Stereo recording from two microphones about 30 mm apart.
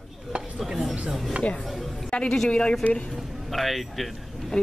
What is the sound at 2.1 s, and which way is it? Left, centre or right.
Speech, left.